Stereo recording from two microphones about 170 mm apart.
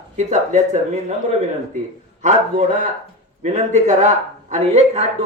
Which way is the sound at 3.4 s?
45° right (ahead or behind).